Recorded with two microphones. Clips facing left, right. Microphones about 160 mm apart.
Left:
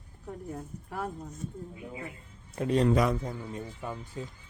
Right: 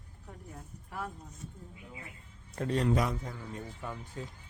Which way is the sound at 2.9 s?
90° left.